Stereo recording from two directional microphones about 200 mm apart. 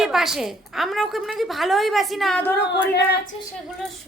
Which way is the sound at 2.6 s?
55° left (ahead or behind).